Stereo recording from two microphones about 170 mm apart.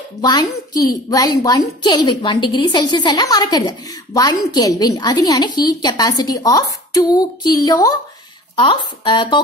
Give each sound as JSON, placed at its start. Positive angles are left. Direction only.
{"t": 0.2, "sound": "a child's voice", "side_deg": 25}